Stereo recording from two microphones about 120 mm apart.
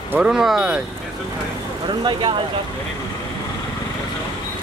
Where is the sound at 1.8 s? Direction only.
40° right (ahead or behind).